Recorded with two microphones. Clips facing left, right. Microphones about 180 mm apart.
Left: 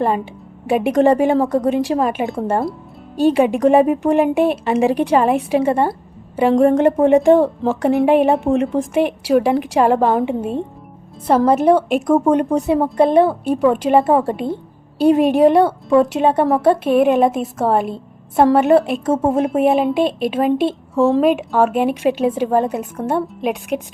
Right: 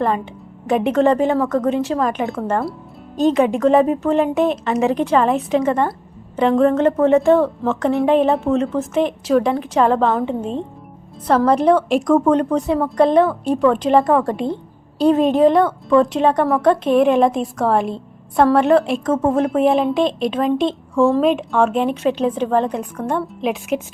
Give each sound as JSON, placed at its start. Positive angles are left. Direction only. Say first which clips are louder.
{"t": 0.7, "sound": "a woman's voice", "louder": "left 1 dB", "side_deg": 15}
{"t": 1.4, "sound": "a woman's voice", "louder": "left 2 dB", "side_deg": 35}
{"t": 1.6, "sound": "a woman's voice", "louder": "left 2 dB", "side_deg": 15}